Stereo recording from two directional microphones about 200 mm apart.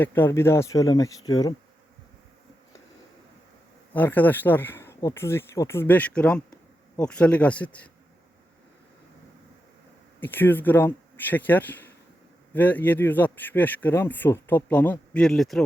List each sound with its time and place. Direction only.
0.0 s speech: 10° left (ahead or behind)
3.9 s speech: 10° left (ahead or behind)
10.2 s speech: 10° left (ahead or behind)